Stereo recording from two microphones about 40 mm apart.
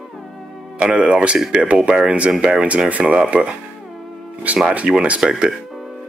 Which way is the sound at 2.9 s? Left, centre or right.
Right.